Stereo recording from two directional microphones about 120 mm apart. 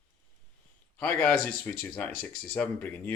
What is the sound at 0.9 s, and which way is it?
Speech, 10° left (ahead or behind).